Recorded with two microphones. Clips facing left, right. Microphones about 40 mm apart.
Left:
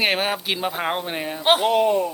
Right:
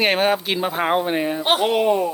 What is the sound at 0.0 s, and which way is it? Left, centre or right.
Speech, centre.